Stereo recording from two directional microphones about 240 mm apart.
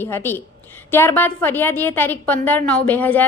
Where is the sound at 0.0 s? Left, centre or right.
Centre.